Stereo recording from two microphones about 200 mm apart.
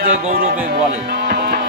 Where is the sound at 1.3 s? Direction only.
55° right (ahead or behind).